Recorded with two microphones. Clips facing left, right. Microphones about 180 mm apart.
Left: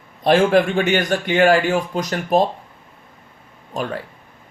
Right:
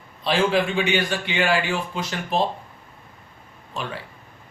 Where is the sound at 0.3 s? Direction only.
50° left (ahead or behind).